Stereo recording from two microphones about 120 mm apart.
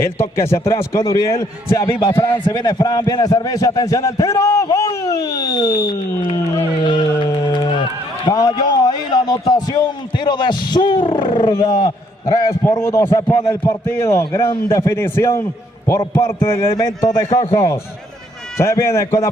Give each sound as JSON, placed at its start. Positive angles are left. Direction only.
{"t": 0.9, "sound": "a man's voice", "side_deg": 25}
{"t": 1.9, "sound": "a man's voice", "side_deg": 45}
{"t": 6.8, "sound": "a sound", "side_deg": 40}
{"t": 8.3, "sound": "a man's voice", "side_deg": 35}
{"t": 17.3, "sound": "a man's voice", "side_deg": 60}
{"t": 18.6, "sound": "a man's voice", "side_deg": 25}